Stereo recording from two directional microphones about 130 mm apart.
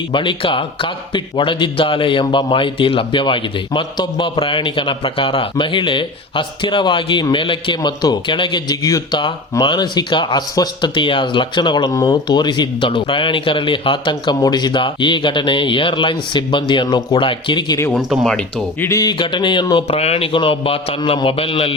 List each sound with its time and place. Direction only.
0.1 s a man's voice: 40° left (ahead or behind)
17.9 s speech: centre (ahead or behind)
18.8 s speech: 25° left (ahead or behind)
19.2 s a man's voice: 35° left (ahead or behind)
19.7 s a man's voice: 50° left (ahead or behind)